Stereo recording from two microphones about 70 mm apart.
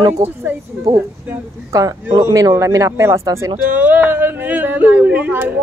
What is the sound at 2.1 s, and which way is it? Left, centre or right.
Speech, right.